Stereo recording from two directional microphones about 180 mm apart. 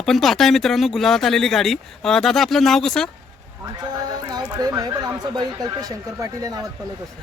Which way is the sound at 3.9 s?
20° right (ahead or behind).